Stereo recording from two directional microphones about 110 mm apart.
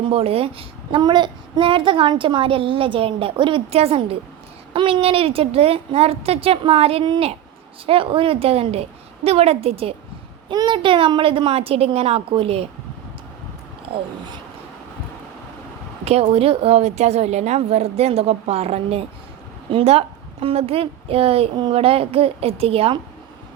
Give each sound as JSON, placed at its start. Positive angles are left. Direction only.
{"t": 0.0, "sound": "speech", "side_deg": -60}
{"t": 1.0, "sound": "a child's voice", "side_deg": -45}
{"t": 10.5, "sound": "speech", "side_deg": -40}
{"t": 13.9, "sound": "speech", "side_deg": -55}
{"t": 16.0, "sound": "a woman's voice", "side_deg": -65}
{"t": 21.5, "sound": "a child's voice", "side_deg": -45}
{"t": 21.8, "sound": "speech", "side_deg": -60}